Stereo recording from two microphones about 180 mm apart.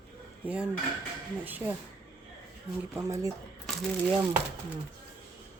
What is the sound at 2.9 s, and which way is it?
Speech, 15° right (ahead or behind).